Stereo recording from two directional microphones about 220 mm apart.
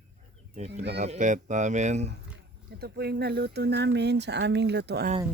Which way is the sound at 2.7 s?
45° right (ahead or behind).